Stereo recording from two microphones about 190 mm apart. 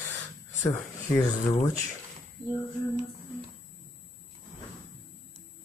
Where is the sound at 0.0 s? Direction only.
15° left (ahead or behind).